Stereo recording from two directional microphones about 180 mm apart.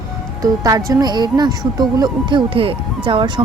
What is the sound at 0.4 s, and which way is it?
Speech, 20° right (ahead or behind).